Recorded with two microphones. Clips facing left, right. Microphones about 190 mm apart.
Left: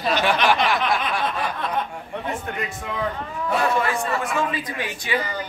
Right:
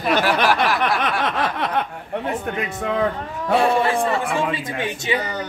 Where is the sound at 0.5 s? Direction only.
60° right (ahead or behind).